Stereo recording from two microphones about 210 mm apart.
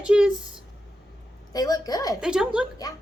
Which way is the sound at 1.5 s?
20° left (ahead or behind).